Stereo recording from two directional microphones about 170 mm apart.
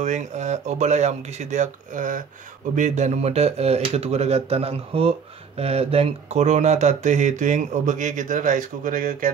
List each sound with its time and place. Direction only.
0.0 s speech: 45° right (ahead or behind)